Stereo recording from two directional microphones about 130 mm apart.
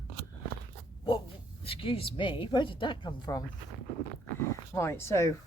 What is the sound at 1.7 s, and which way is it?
A woman's voice, 45° left (ahead or behind).